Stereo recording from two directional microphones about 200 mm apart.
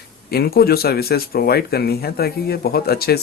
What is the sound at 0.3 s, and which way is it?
Speech, 50° left (ahead or behind).